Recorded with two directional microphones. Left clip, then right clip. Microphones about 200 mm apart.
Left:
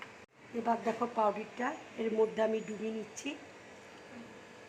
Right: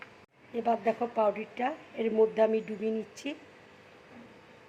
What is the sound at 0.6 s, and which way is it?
A woman's voice, 40° right (ahead or behind).